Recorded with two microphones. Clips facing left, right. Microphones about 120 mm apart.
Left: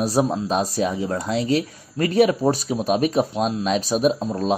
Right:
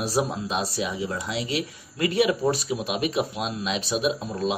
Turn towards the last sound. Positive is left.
turn(degrees=30)  # may be behind; listen again after turning